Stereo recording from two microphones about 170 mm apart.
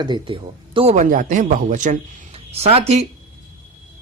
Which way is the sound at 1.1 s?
50° right (ahead or behind).